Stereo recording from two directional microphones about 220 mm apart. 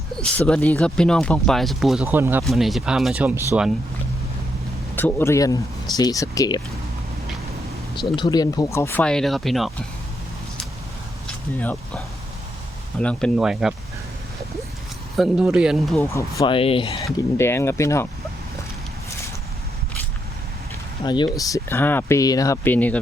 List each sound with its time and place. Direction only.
0.2 s speech: 5° left (ahead or behind)
4.9 s speech: 10° left (ahead or behind)
7.9 s speech: 20° left (ahead or behind); by 9.7 s centre (ahead or behind)
11.6 s speech: 5° left (ahead or behind)
15.1 s speech: centre (ahead or behind)
16.0 s speech: 15° left (ahead or behind)
16.4 s speech: 25° left (ahead or behind)
17.3 s speech: 10° left (ahead or behind)
21.0 s speech: 20° left (ahead or behind)